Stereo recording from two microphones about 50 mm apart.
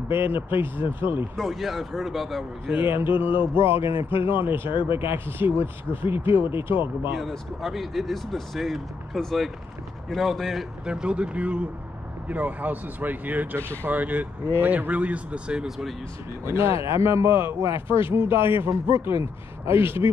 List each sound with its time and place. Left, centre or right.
0.1 s a man's voice: right
1.3 s speech: centre
2.8 s a man's voice: right
7.2 s speech: centre
10.9 s speech: right
16.4 s a man's voice: right